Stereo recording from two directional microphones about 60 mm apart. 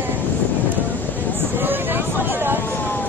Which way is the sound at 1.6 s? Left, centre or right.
Right.